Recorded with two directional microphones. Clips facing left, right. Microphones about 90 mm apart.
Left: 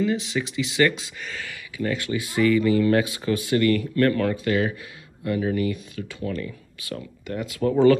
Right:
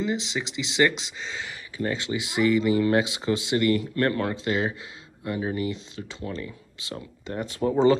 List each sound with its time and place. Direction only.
0.0 s speech: 25° right (ahead or behind)